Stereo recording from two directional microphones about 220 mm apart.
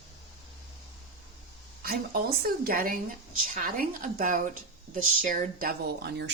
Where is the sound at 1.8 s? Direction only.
45° right (ahead or behind).